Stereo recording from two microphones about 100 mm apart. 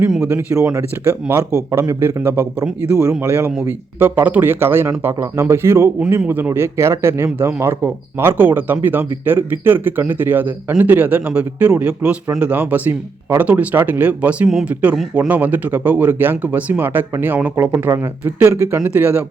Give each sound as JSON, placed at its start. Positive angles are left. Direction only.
{"t": 0.3, "sound": "speech", "side_deg": -25}